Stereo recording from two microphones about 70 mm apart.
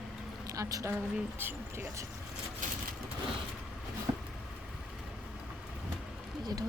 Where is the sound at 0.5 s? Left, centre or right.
Right.